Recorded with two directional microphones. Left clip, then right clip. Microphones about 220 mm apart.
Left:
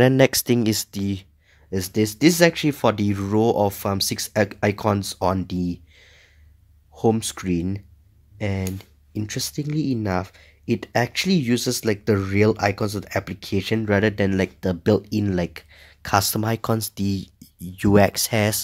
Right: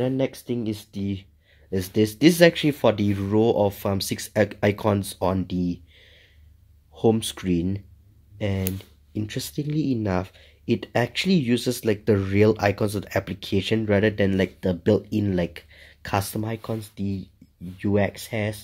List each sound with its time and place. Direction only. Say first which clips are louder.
0.0 s speech: left 9 dB; 35° left (ahead or behind)